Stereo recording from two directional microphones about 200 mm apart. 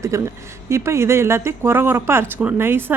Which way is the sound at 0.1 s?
15° right (ahead or behind).